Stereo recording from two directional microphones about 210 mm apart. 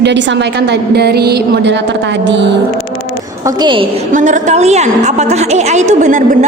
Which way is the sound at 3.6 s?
25° right (ahead or behind).